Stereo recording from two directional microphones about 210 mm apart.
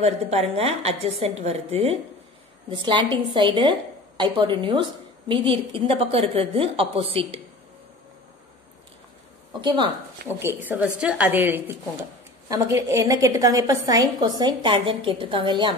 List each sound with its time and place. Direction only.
0.0 s a woman's voice: 30° right (ahead or behind)
9.6 s a woman's voice: 20° right (ahead or behind)